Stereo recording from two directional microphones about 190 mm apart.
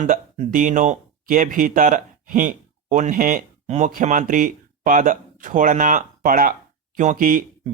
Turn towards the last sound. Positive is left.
turn(degrees=-50)  # may be behind; listen again after turning